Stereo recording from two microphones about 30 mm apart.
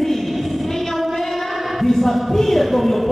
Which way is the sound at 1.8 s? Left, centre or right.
Centre.